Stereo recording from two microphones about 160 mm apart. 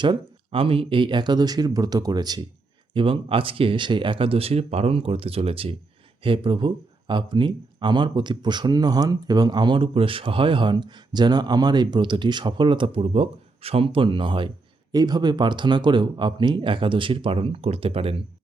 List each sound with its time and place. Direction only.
0.0 s speech: 30° right (ahead or behind)